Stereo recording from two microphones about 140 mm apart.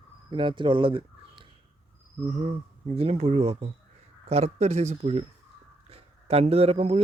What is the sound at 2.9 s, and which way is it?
A man's voice, 45° right (ahead or behind).